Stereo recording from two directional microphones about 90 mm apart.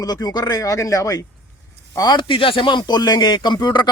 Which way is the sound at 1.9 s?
50° left (ahead or behind).